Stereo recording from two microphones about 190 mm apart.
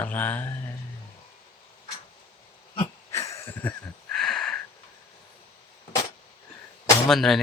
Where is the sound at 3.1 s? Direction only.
15° left (ahead or behind).